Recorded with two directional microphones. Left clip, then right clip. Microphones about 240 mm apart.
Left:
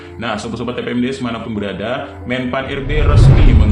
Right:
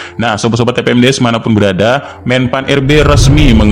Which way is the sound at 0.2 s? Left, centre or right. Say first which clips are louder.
Right 10 dB; right.